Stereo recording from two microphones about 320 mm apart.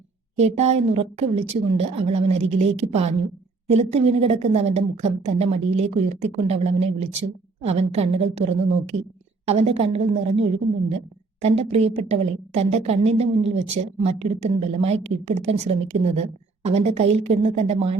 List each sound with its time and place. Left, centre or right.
0.3 s a woman's voice: centre
9.5 s a woman's voice: centre